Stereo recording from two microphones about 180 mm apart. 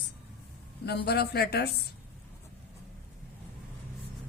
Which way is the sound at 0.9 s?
65° left (ahead or behind).